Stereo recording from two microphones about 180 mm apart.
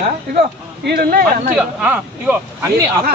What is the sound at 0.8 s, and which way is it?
Speech, 60° right (ahead or behind).